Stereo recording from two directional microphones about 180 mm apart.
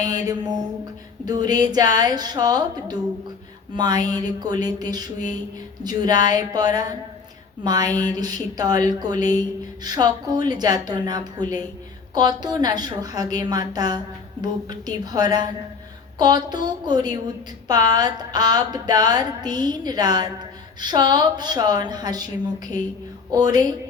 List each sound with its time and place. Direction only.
0.1 s a woman's voice: 20° right (ahead or behind)
23.3 s a woman's voice: 20° right (ahead or behind)